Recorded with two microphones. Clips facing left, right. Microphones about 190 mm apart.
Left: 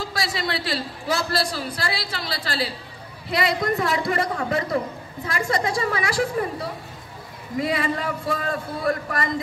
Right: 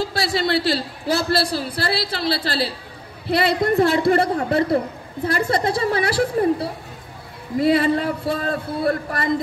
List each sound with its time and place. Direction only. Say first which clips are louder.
0.1 s a man's voice: right 6 dB; 30° right (ahead or behind)